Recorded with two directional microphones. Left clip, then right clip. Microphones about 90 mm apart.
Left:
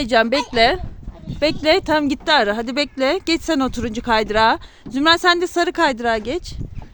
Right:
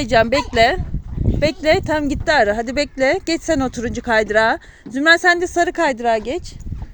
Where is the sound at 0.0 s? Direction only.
15° left (ahead or behind).